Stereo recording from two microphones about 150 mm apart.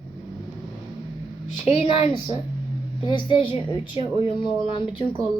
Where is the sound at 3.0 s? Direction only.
30° left (ahead or behind).